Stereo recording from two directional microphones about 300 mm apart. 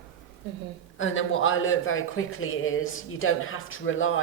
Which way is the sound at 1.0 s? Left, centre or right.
Left.